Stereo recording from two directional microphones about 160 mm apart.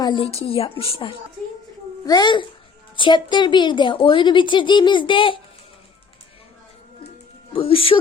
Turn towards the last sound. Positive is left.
turn(degrees=35)  # may be behind; listen again after turning